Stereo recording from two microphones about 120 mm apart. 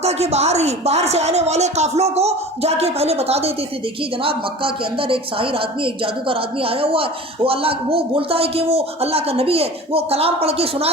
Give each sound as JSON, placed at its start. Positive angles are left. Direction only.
{"t": 0.0, "sound": "speech", "side_deg": -60}